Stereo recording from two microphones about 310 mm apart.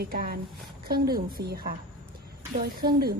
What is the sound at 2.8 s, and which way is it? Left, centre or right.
Speech, right.